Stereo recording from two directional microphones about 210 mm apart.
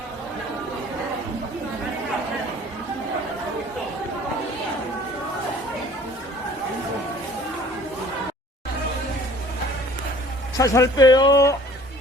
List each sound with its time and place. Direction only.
10.6 s speech: 15° left (ahead or behind)